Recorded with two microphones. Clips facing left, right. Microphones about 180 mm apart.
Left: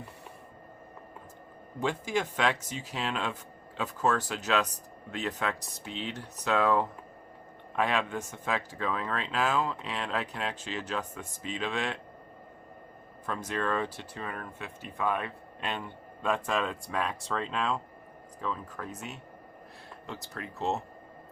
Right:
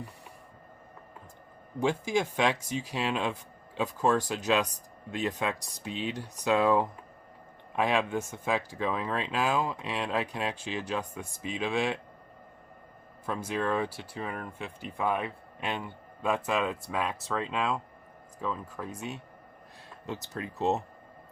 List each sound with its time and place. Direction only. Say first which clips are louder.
1.8 s speech: right 3 dB; 15° right (ahead or behind)
13.2 s speech: right 1 dB; 10° right (ahead or behind)
20.1 s speech: right 4 dB; 20° right (ahead or behind)